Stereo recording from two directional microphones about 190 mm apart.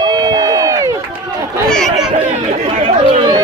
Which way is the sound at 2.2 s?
35° right (ahead or behind).